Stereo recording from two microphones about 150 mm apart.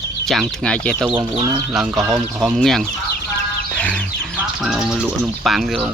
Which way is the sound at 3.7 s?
10° left (ahead or behind).